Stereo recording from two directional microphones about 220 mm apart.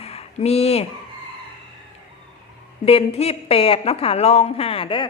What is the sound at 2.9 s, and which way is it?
Speech, 25° left (ahead or behind).